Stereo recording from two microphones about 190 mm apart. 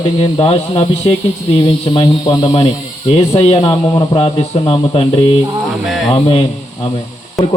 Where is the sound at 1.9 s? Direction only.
25° left (ahead or behind).